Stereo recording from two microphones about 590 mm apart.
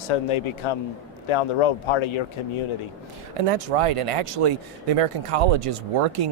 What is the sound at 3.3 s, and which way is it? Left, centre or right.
Speech, right.